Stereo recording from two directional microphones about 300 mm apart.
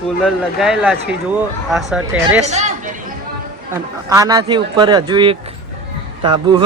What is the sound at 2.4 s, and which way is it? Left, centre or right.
Speech, right.